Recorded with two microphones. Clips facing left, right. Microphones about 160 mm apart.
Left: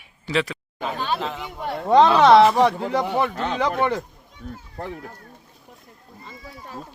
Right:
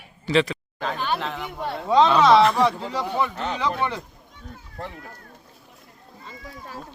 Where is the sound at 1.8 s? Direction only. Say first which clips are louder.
Left 3 dB; 55° left (ahead or behind).